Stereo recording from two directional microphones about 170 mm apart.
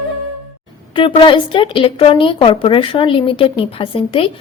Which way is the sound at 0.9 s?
30° left (ahead or behind).